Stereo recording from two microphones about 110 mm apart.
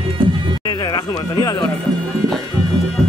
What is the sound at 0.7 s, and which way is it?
Speech, 40° left (ahead or behind).